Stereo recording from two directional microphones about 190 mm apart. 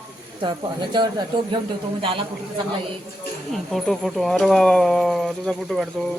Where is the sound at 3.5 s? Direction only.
Centre (ahead or behind).